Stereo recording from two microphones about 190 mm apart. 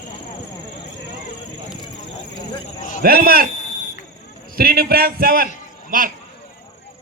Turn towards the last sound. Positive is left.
turn(degrees=-45)  # may be behind; listen again after turning